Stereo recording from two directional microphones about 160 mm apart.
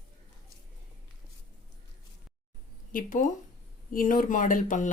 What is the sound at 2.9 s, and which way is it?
Speech, 60° left (ahead or behind).